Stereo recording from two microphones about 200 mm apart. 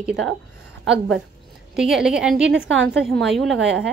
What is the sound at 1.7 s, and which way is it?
Speech, 5° right (ahead or behind).